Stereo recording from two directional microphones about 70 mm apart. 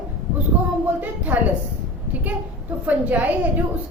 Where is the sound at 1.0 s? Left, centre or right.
Right.